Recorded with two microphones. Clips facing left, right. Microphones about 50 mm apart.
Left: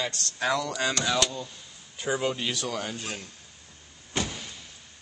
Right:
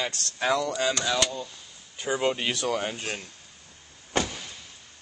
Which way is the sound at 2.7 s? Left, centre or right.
Right.